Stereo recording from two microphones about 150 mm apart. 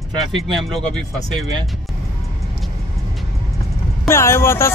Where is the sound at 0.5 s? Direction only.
Centre (ahead or behind).